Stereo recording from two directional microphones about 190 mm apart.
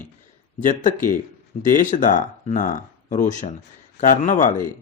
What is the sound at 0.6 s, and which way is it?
Speech, 40° left (ahead or behind).